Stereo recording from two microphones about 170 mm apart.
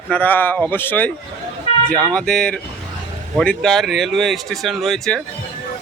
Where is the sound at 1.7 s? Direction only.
35° left (ahead or behind).